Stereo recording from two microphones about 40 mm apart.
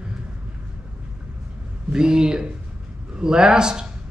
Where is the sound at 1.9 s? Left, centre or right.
Centre.